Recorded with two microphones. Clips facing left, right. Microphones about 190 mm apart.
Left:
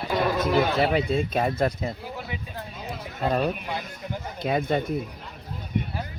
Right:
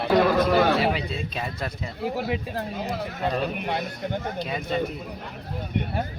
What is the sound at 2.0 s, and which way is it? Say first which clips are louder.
Speech: right 8 dB; 70° right (ahead or behind).